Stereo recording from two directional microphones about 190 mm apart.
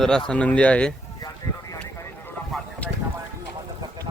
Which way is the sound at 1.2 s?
20° left (ahead or behind).